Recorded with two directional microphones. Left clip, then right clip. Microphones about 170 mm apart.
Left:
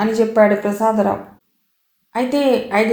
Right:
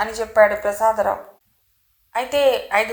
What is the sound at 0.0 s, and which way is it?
Speech, 25° right (ahead or behind).